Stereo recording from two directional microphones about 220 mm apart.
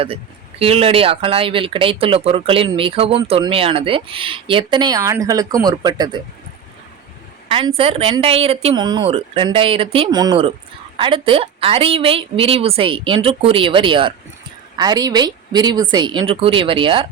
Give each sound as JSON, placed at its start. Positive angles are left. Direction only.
{"t": 0.6, "sound": "speech", "side_deg": -25}
{"t": 7.4, "sound": "speech", "side_deg": -25}